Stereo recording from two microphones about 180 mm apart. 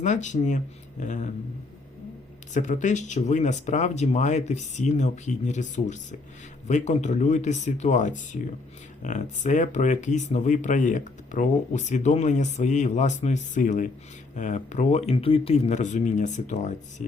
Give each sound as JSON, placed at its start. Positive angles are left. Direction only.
{"t": 0.0, "sound": "speech", "side_deg": 40}
{"t": 2.5, "sound": "speech", "side_deg": 45}